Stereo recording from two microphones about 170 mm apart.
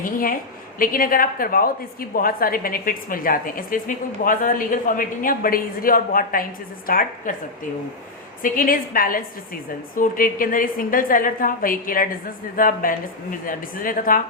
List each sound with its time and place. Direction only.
0.0 s a woman's voice: 55° left (ahead or behind)
8.4 s a woman's voice: 55° left (ahead or behind)